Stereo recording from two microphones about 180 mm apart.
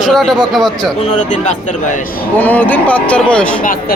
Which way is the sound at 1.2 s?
45° left (ahead or behind).